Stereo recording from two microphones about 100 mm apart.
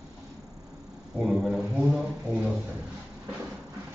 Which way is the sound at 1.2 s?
5° right (ahead or behind).